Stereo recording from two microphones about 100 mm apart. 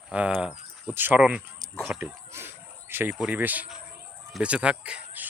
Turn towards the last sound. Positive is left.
turn(degrees=-10)  # may be behind; listen again after turning